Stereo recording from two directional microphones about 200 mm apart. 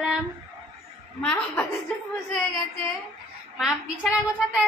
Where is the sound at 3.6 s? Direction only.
5° right (ahead or behind).